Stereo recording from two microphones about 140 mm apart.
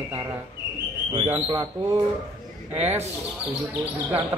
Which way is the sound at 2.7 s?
50° right (ahead or behind).